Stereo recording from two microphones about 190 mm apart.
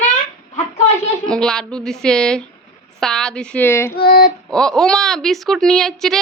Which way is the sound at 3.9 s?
55° left (ahead or behind).